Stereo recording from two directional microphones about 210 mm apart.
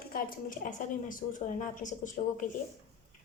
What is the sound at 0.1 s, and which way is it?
A woman's voice, 40° left (ahead or behind).